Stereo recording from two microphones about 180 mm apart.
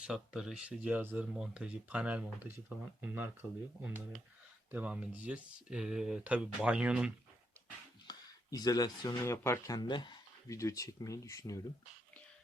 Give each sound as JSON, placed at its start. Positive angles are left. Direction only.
{"t": 0.0, "sound": "speech", "side_deg": -5}
{"t": 8.0, "sound": "speech", "side_deg": 20}